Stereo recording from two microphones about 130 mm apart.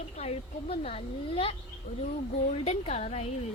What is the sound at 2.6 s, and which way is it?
Speech, 60° left (ahead or behind).